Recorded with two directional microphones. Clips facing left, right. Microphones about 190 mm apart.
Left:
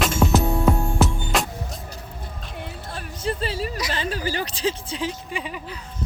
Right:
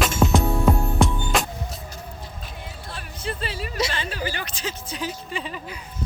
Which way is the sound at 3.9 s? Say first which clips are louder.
Left 3 dB; 40° left (ahead or behind).